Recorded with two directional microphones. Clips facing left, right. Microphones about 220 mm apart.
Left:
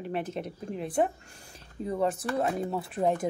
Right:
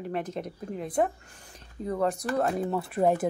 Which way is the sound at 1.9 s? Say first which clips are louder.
Right 1 dB; 5° left (ahead or behind).